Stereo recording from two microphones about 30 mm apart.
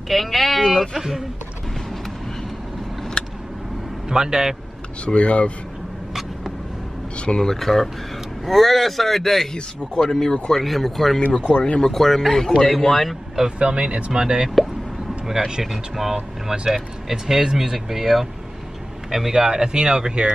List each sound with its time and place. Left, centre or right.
0.1 s speech: centre
0.9 s speech: centre
3.2 s vehicle: left
4.1 s speech: right
5.0 s speech: left
7.2 s speech: left
7.4 s speech: centre
11.4 s speech: left
11.9 s speech: centre
13.6 s speech: right
15.2 s speech: centre
17.7 s a man's voice: centre
19.3 s speech: right